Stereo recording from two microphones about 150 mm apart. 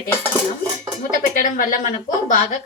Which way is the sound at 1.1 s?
65° left (ahead or behind).